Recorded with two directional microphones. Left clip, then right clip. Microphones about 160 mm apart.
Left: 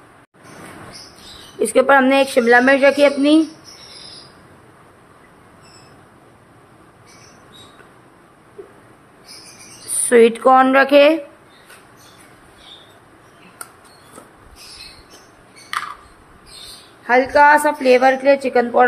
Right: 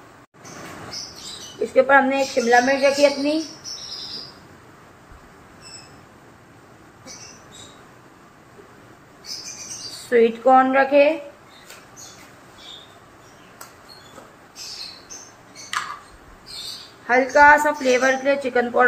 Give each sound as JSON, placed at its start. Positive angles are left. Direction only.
{"t": 1.6, "sound": "speech", "side_deg": 50}
{"t": 10.0, "sound": "a woman's voice", "side_deg": 40}
{"t": 17.0, "sound": "a woman's voice", "side_deg": 50}